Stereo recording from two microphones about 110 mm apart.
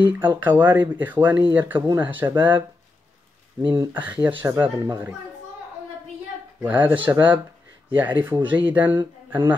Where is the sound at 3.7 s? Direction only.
15° right (ahead or behind).